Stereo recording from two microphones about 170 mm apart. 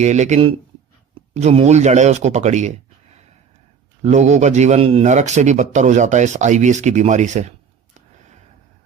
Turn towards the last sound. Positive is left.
turn(degrees=-45)  # may be behind; listen again after turning